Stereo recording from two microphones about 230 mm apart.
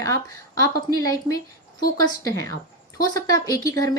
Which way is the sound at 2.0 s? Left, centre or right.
Centre.